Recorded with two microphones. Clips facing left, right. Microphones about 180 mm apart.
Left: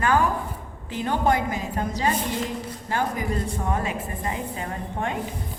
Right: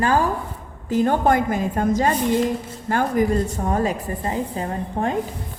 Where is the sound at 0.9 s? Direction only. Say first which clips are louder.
Right 5 dB; 45° right (ahead or behind).